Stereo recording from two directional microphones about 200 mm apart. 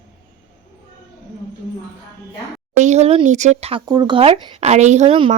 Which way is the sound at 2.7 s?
35° right (ahead or behind).